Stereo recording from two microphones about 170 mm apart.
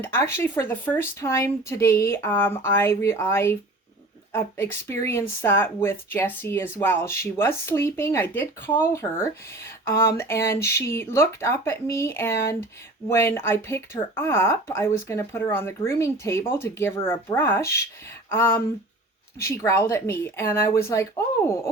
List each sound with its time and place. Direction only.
0.0 s speech: 15° left (ahead or behind)